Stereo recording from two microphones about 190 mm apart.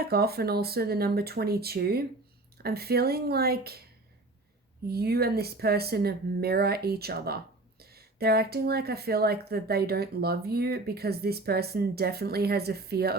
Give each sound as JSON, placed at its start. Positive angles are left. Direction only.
{"t": 0.0, "sound": "speech", "side_deg": -55}
{"t": 4.9, "sound": "speech", "side_deg": -55}